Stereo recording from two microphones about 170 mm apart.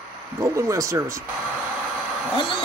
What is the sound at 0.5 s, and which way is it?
Speech, 20° right (ahead or behind).